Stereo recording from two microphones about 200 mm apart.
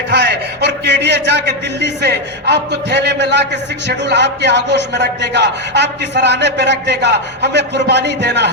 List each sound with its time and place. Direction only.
0.1 s a man's voice: 60° right (ahead or behind)